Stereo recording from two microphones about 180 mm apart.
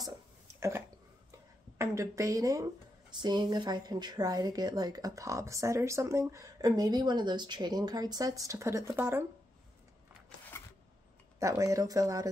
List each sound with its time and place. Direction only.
0.6 s a sound: 15° right (ahead or behind)
1.8 s speech: 15° right (ahead or behind)
11.3 s speech: 15° right (ahead or behind)